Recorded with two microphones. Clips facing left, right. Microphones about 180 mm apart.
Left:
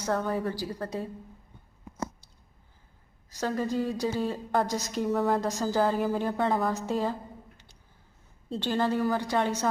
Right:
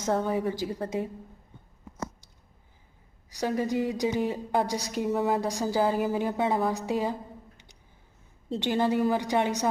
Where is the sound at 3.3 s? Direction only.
15° right (ahead or behind).